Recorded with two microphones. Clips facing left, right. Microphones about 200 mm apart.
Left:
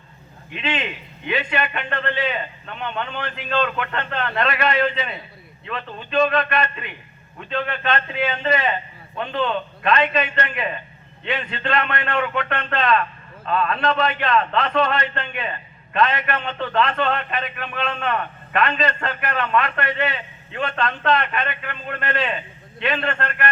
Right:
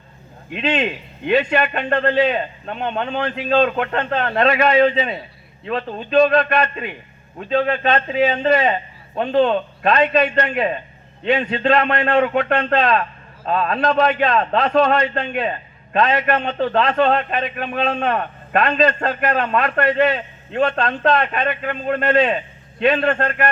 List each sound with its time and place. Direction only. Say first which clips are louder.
0.6 s a man's voice: right 6 dB; 40° right (ahead or behind)